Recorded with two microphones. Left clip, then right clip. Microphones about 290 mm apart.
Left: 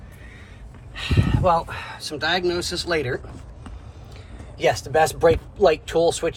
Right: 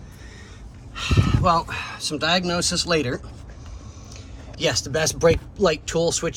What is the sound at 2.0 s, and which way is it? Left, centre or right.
A man's voice, centre.